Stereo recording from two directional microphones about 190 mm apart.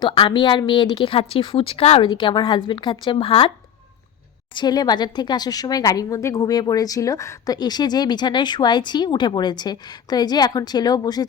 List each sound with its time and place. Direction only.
0.0 s a woman's voice: 25° left (ahead or behind)
4.5 s a woman's voice: 20° left (ahead or behind)